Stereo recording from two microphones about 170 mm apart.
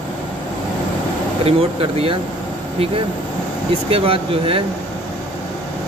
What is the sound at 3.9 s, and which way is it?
Speech, 35° right (ahead or behind).